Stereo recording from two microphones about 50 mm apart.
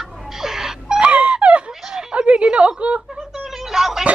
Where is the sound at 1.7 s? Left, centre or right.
Centre.